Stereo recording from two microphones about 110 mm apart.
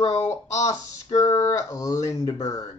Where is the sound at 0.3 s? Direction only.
30° left (ahead or behind).